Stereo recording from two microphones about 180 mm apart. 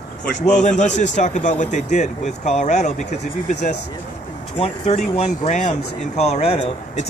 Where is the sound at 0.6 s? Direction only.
40° left (ahead or behind).